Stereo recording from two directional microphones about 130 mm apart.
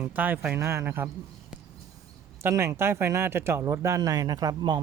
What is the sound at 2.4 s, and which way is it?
Speech, 20° right (ahead or behind).